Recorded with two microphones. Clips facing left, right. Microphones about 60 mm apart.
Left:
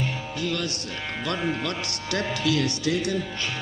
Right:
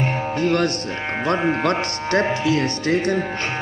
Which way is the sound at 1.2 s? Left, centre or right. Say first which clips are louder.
Right 8 dB; right.